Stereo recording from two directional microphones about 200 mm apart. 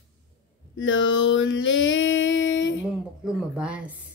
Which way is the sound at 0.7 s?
70° left (ahead or behind).